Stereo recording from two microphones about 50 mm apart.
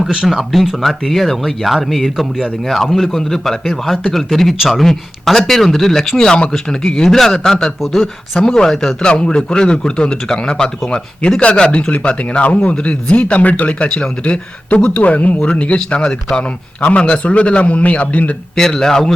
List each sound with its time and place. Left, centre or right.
0.0 s speech: centre
0.3 s a man's voice: centre
7.8 s speech: centre
8.4 s a man's voice: centre; by 18.3 s left
18.5 s a man's voice: centre